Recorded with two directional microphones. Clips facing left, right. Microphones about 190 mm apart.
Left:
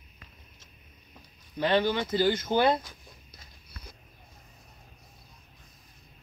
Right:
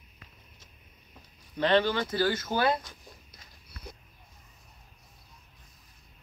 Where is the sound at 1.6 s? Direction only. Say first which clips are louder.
Right 1 dB; 10° left (ahead or behind).